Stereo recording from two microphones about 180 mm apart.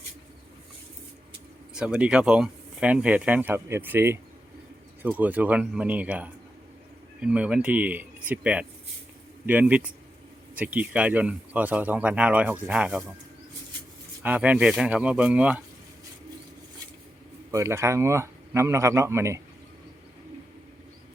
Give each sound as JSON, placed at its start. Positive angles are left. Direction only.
{"t": 1.7, "sound": "speech", "side_deg": -5}
{"t": 14.2, "sound": "speech", "side_deg": -5}
{"t": 17.5, "sound": "speech", "side_deg": -15}